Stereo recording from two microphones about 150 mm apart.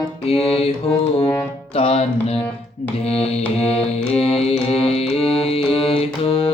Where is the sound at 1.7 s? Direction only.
40° left (ahead or behind).